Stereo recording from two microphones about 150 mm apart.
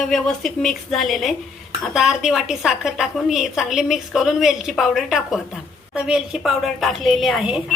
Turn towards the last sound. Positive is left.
turn(degrees=-5)  # may be behind; listen again after turning